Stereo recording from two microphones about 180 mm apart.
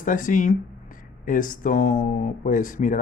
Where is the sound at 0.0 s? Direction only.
45° left (ahead or behind).